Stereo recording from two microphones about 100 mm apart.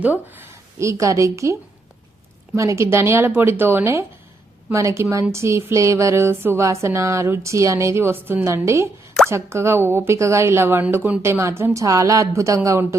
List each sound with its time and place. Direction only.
0.0 s a woman's voice: 20° right (ahead or behind)
2.6 s a woman's voice: 30° right (ahead or behind)